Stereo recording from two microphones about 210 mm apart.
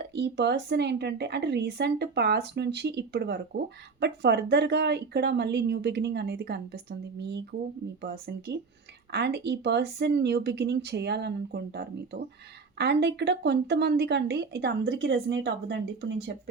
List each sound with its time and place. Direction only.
0.1 s a woman's voice: 55° right (ahead or behind)